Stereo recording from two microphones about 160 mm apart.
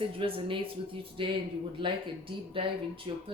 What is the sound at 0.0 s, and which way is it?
Speech, 35° right (ahead or behind).